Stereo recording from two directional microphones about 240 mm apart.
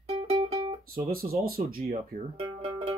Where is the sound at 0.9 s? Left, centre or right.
Right.